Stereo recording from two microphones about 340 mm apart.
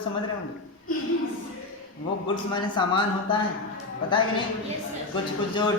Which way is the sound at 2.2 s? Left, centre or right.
Centre.